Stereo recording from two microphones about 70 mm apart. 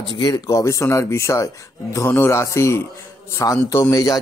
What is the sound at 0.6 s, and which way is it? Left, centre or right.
A man's voice, left.